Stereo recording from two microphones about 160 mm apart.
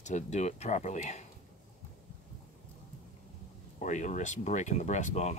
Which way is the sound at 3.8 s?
50° left (ahead or behind).